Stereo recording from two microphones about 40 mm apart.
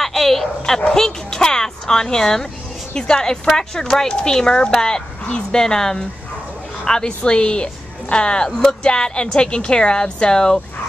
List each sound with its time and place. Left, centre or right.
0.0 s bow-wow: centre
0.7 s a woman's voice: centre
1.0 s music: centre
2.9 s a woman's voice: centre
8.5 s speech: centre
8.8 s a woman's voice: left